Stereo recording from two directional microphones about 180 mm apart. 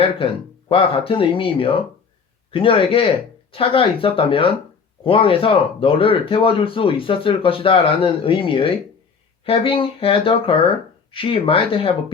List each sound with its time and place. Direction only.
0.7 s speech: 30° left (ahead or behind)